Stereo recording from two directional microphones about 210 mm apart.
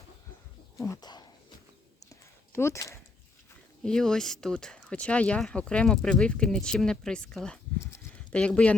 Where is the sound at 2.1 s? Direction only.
10° left (ahead or behind).